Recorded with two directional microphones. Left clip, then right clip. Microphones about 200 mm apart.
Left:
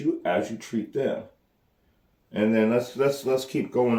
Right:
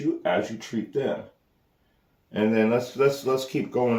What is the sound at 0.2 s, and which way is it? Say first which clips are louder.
Speech: right 1 dB; 10° right (ahead or behind).